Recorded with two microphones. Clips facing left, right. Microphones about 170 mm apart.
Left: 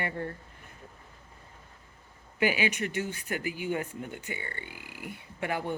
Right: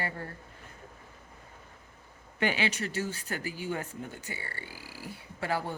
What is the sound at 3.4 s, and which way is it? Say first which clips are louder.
Speech: left 3 dB; 15° left (ahead or behind).